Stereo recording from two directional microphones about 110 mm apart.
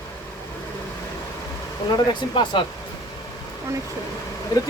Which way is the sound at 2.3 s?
45° left (ahead or behind).